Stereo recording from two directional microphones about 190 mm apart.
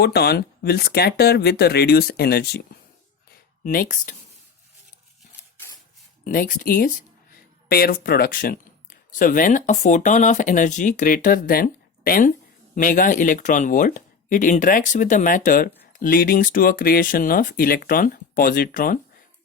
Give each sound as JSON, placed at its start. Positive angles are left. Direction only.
{"t": 0.0, "sound": "speech", "side_deg": 60}
{"t": 3.6, "sound": "speech", "side_deg": 45}
{"t": 6.2, "sound": "speech", "side_deg": 45}